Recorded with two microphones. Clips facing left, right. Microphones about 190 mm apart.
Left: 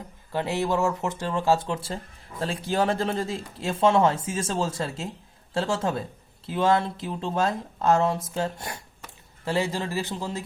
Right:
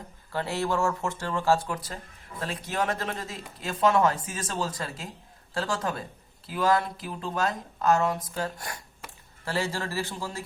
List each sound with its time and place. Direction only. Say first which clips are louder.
0.3 s speech: left 3 dB; 20° left (ahead or behind)